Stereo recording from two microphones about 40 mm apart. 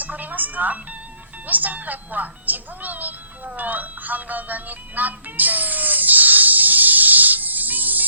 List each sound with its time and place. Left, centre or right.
0.0 s music: right
1.5 s speech: right